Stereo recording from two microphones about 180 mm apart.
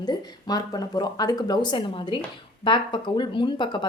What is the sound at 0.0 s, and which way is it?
Speech, 20° left (ahead or behind).